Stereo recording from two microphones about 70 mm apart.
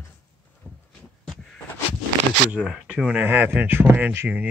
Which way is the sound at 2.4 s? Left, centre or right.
Centre.